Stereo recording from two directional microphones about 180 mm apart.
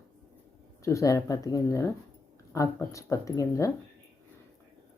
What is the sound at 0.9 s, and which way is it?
Speech, 20° left (ahead or behind).